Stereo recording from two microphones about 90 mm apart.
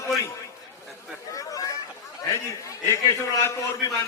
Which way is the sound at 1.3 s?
40° left (ahead or behind).